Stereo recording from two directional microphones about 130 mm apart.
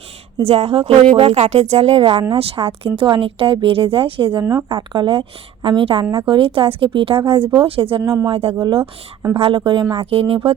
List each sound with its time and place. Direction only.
0.4 s a woman's voice: 50° right (ahead or behind)
8.0 s speech: 20° right (ahead or behind)
8.3 s a woman's voice: 50° right (ahead or behind)